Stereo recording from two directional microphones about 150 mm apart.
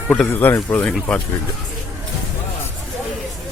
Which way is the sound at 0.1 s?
10° left (ahead or behind).